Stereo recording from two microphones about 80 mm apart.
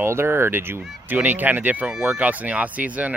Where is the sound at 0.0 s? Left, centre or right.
Right.